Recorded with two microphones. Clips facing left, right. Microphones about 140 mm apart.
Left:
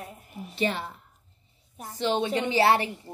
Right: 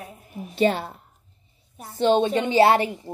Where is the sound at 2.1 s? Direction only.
30° right (ahead or behind).